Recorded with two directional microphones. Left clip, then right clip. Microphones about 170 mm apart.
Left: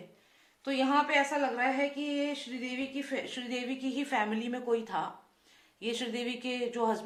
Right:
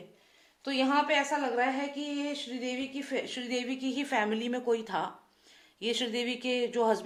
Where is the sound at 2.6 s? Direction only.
35° right (ahead or behind).